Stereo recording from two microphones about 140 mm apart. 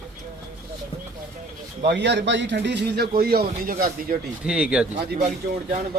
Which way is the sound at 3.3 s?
90° right.